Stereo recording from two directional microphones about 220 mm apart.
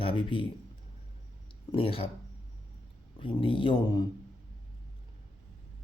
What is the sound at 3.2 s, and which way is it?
Speech, 25° left (ahead or behind).